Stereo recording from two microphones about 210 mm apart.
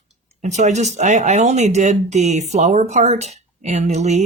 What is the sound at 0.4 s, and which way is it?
Speech, 35° right (ahead or behind).